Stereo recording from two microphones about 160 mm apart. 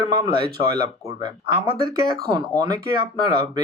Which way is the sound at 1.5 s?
30° right (ahead or behind).